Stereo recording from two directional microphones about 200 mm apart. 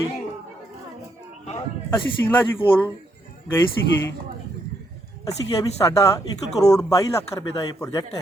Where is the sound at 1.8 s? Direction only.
10° left (ahead or behind).